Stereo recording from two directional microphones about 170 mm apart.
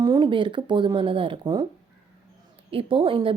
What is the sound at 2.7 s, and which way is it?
Speech, 30° right (ahead or behind).